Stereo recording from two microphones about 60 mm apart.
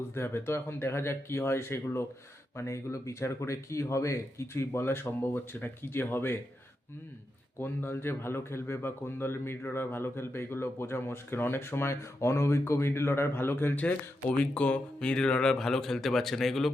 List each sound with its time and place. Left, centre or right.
0.1 s a man's voice: left
7.6 s a man's voice: left
14.3 s speech: centre